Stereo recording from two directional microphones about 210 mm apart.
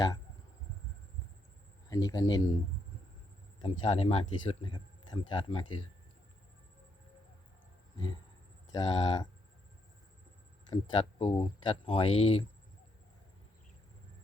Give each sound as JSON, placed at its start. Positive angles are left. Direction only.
{"t": 1.9, "sound": "speech", "side_deg": 15}
{"t": 3.6, "sound": "speech", "side_deg": 25}
{"t": 8.7, "sound": "speech", "side_deg": 20}
{"t": 10.7, "sound": "speech", "side_deg": 25}